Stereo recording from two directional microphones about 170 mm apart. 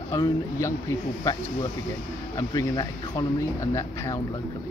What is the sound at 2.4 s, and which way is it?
Speech, 20° left (ahead or behind).